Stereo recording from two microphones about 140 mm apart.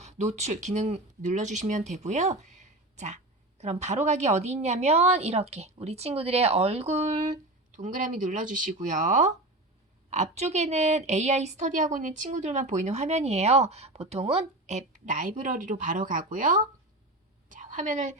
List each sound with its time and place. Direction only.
0.0 s a woman's voice: 55° right (ahead or behind)